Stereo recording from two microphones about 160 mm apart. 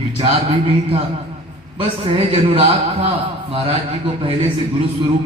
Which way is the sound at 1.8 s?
35° right (ahead or behind).